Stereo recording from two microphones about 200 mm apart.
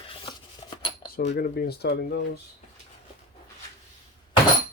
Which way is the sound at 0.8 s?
25° left (ahead or behind).